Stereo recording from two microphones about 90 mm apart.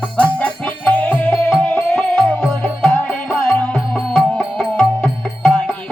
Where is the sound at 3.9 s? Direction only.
5° left (ahead or behind).